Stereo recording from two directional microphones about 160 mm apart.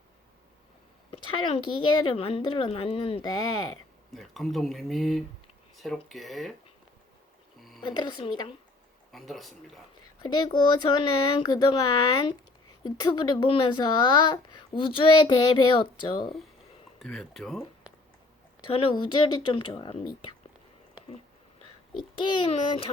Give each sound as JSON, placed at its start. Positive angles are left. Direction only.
{"t": 1.1, "sound": "a woman's voice", "side_deg": 40}
{"t": 3.2, "sound": "speech", "side_deg": 25}
{"t": 4.1, "sound": "speech", "side_deg": 0}
{"t": 7.8, "sound": "speech", "side_deg": 30}
{"t": 9.1, "sound": "speech", "side_deg": 0}
{"t": 10.2, "sound": "speech", "side_deg": 30}
{"t": 12.8, "sound": "speech", "side_deg": 30}
{"t": 17.0, "sound": "speech", "side_deg": 0}
{"t": 18.7, "sound": "speech", "side_deg": 35}
{"t": 21.9, "sound": "speech", "side_deg": 30}